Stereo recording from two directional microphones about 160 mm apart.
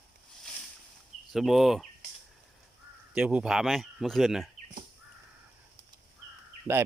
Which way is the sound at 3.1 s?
5° right (ahead or behind).